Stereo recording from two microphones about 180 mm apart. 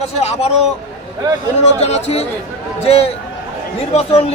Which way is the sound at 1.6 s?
35° left (ahead or behind).